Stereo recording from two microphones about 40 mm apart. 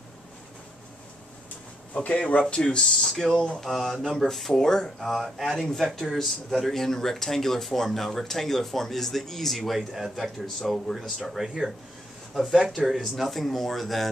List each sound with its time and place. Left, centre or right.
2.0 s speech: left
2.8 s speech: centre
11.4 s speech: centre